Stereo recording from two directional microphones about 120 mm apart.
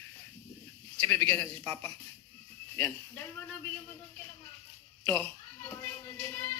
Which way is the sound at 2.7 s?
20° left (ahead or behind).